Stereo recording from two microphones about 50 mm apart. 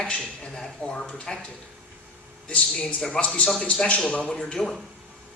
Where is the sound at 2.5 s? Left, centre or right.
Left.